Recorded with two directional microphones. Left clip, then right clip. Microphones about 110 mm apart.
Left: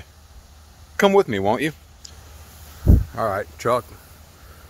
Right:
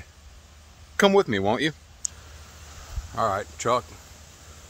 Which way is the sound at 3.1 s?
10° left (ahead or behind).